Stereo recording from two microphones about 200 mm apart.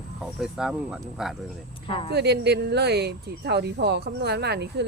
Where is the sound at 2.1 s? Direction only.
55° right (ahead or behind).